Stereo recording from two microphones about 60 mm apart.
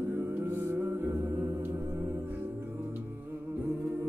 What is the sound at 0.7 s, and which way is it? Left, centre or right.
Music, right.